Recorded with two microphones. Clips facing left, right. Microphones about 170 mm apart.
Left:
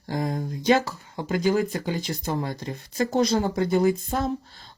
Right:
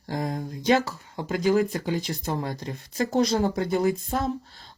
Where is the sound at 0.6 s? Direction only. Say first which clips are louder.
Left 1 dB; centre (ahead or behind).